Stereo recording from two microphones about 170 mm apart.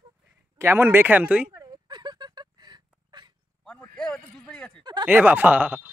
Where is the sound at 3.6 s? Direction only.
5° left (ahead or behind).